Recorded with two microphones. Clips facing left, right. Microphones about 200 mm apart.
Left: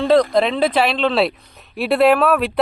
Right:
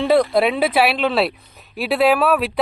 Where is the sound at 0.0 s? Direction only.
10° right (ahead or behind).